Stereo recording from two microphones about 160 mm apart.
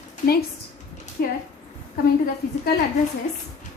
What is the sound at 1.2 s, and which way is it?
Speech, 75° left (ahead or behind).